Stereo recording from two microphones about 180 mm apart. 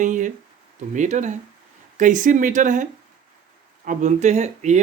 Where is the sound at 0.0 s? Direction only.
45° right (ahead or behind).